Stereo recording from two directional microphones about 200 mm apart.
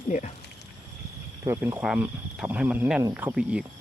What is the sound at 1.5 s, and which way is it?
Speech, 10° right (ahead or behind).